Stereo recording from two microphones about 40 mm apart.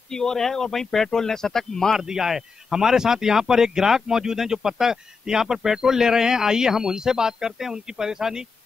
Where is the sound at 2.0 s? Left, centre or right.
Centre.